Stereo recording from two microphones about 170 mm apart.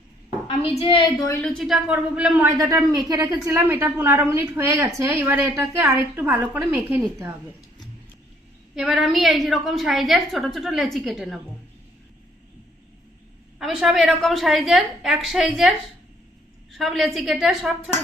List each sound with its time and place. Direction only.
0.4 s a woman's voice: 35° left (ahead or behind)
1.3 s a woman's voice: 5° left (ahead or behind)
2.9 s a woman's voice: 25° right (ahead or behind)
8.7 s a woman's voice: centre (ahead or behind)
13.6 s a woman's voice: centre (ahead or behind)
16.7 s a woman's voice: centre (ahead or behind)